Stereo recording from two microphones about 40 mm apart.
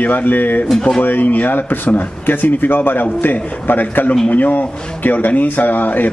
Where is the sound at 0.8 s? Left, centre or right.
Centre.